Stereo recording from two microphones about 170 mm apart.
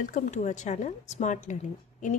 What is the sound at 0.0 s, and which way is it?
Speech, 45° left (ahead or behind).